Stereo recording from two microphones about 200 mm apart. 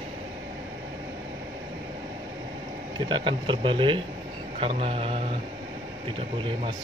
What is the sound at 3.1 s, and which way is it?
Speech, 25° right (ahead or behind).